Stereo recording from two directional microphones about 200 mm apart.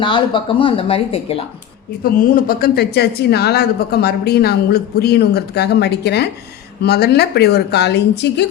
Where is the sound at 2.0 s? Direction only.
45° left (ahead or behind).